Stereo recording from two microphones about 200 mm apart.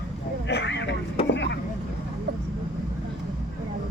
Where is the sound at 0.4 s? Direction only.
60° left (ahead or behind).